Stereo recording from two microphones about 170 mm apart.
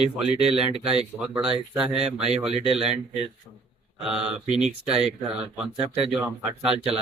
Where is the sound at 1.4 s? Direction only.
5° right (ahead or behind).